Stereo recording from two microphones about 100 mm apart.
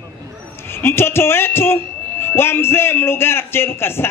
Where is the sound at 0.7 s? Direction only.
25° left (ahead or behind).